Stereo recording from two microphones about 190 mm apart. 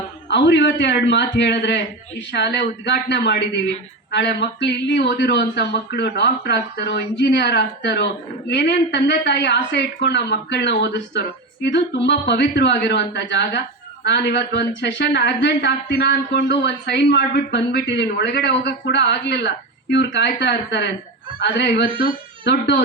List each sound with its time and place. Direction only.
0.3 s a man's voice: 65° left (ahead or behind)